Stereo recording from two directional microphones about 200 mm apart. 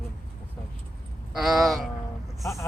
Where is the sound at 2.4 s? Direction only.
15° left (ahead or behind).